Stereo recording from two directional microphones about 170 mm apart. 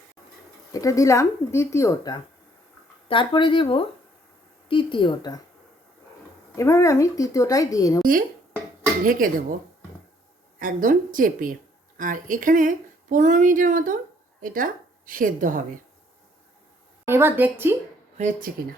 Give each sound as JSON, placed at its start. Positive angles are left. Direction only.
{"t": 0.7, "sound": "speech", "side_deg": 20}
{"t": 3.1, "sound": "a woman's voice", "side_deg": 30}
{"t": 6.6, "sound": "a woman's voice", "side_deg": 15}
{"t": 9.0, "sound": "a woman's voice", "side_deg": -55}
{"t": 10.6, "sound": "a woman's voice", "side_deg": -55}
{"t": 17.1, "sound": "a woman's voice", "side_deg": -15}